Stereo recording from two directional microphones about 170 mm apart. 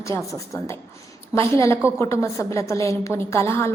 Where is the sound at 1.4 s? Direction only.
15° left (ahead or behind).